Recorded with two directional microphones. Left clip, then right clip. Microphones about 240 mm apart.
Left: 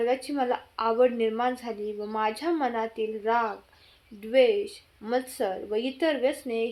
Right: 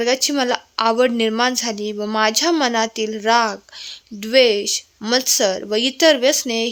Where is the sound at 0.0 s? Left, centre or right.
Right.